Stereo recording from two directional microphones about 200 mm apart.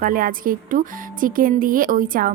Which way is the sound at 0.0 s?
45° right (ahead or behind).